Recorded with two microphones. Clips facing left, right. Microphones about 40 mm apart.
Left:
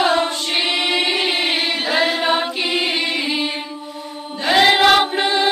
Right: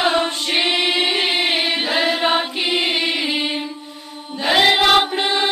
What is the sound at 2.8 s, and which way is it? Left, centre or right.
Music, right.